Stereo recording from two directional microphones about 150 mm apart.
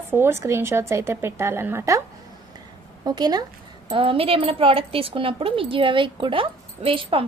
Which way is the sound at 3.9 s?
40° right (ahead or behind).